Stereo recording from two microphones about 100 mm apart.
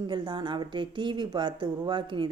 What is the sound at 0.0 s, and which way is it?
Speech, 50° right (ahead or behind).